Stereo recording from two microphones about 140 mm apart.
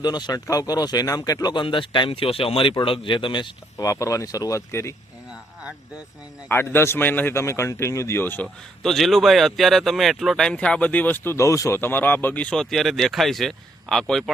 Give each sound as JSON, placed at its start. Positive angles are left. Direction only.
{"t": 0.0, "sound": "speech", "side_deg": 30}
{"t": 3.8, "sound": "speech", "side_deg": 25}
{"t": 6.5, "sound": "speech", "side_deg": 15}
{"t": 8.8, "sound": "speech", "side_deg": 0}